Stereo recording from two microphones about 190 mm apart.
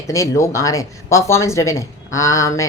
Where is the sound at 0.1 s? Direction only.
15° left (ahead or behind).